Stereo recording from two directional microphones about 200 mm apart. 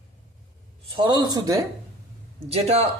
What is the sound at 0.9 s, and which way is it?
Speech, 25° right (ahead or behind).